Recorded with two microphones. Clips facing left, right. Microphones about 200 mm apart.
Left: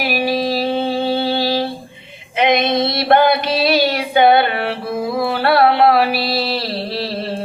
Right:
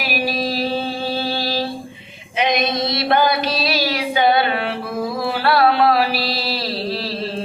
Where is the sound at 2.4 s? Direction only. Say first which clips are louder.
Left 4 dB; 55° left (ahead or behind).